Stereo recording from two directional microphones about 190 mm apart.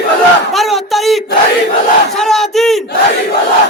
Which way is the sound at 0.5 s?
Centre (ahead or behind).